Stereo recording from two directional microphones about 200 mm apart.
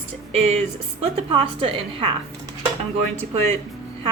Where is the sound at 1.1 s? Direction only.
25° right (ahead or behind).